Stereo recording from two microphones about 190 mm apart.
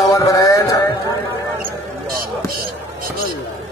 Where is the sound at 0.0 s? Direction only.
15° left (ahead or behind).